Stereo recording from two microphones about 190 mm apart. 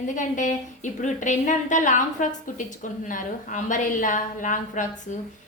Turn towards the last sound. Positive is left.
turn(degrees=40)  # may be behind; listen again after turning